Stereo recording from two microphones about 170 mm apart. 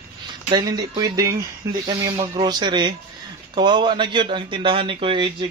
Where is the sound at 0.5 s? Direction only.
25° right (ahead or behind).